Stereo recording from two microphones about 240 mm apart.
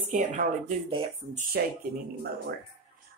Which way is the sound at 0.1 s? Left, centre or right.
Right.